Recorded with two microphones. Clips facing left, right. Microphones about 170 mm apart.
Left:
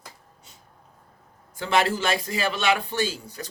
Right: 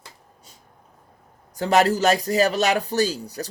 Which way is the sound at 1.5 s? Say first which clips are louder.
Right 5 dB; 40° right (ahead or behind).